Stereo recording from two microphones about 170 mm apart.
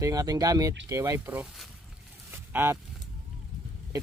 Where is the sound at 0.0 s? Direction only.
20° right (ahead or behind).